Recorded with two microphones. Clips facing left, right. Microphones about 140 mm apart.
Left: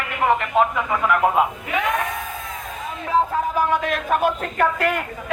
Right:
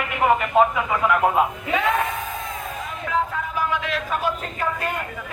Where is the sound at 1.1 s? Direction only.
Centre (ahead or behind).